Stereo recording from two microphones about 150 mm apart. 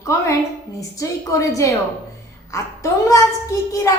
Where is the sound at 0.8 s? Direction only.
20° left (ahead or behind).